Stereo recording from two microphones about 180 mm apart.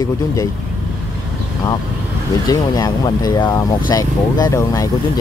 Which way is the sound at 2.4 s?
20° left (ahead or behind).